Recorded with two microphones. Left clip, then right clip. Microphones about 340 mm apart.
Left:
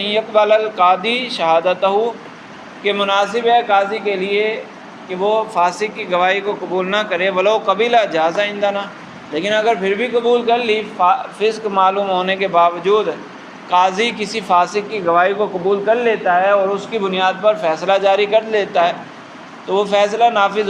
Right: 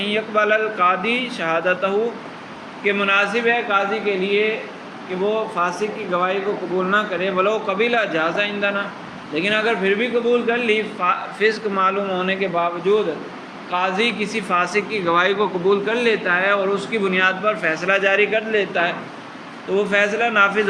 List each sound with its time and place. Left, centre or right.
0.0 s a man's voice: centre
5.5 s a man's voice: centre